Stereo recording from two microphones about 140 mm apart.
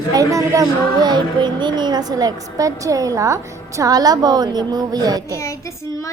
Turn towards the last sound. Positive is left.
turn(degrees=-25)  # may be behind; listen again after turning